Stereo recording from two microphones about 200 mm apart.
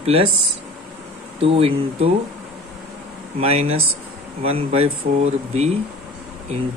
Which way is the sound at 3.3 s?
30° right (ahead or behind).